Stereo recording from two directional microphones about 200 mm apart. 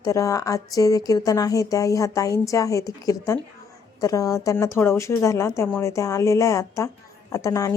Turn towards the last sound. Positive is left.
turn(degrees=15)  # may be behind; listen again after turning